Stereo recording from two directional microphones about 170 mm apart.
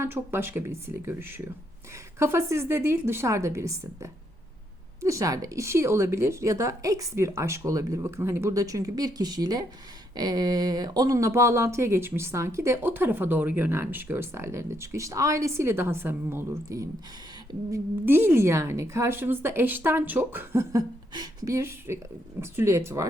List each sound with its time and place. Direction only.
0.0 s a woman's voice: 15° right (ahead or behind)